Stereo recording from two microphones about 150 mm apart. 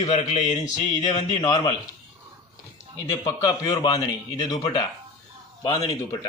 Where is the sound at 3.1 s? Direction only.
25° left (ahead or behind).